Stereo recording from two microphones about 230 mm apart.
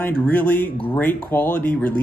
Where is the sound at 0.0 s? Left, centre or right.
Centre.